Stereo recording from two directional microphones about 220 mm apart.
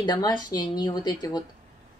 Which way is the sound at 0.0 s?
20° left (ahead or behind).